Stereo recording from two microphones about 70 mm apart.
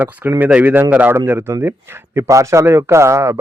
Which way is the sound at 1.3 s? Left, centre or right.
Right.